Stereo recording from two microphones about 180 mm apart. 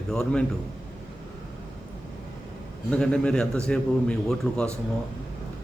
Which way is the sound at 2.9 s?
5° left (ahead or behind).